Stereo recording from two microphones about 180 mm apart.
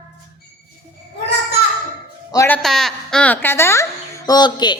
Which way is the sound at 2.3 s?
15° left (ahead or behind).